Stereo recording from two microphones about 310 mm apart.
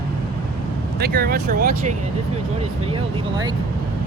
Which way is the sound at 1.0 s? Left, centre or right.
Right.